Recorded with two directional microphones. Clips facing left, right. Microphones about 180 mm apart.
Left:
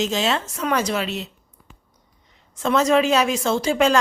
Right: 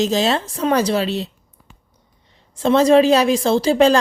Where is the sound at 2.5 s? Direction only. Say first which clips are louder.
Right 5 dB; 30° right (ahead or behind).